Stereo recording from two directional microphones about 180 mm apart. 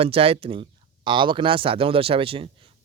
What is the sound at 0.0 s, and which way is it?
Speech, 30° right (ahead or behind).